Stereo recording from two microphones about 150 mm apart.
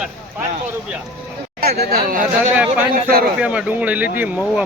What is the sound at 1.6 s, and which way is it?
A man's voice, 90° right.